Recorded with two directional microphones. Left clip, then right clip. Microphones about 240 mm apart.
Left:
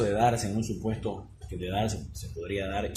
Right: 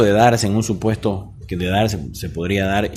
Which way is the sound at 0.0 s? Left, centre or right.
Right.